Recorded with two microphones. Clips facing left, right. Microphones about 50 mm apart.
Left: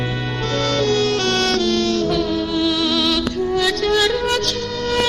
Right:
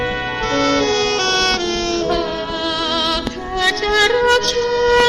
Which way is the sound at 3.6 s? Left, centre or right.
Right.